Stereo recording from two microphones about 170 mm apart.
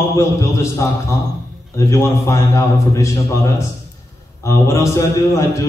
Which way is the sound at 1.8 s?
15° left (ahead or behind).